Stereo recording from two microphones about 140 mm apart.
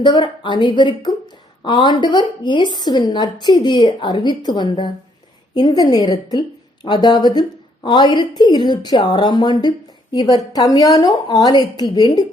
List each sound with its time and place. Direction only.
0.0 s a woman's voice: 35° left (ahead or behind)